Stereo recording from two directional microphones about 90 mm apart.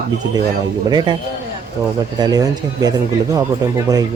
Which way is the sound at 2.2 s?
50° right (ahead or behind).